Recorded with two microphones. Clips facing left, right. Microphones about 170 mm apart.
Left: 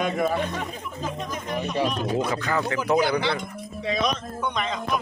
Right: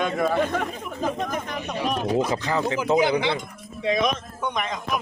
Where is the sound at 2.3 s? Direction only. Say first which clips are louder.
Right 1 dB; 20° right (ahead or behind).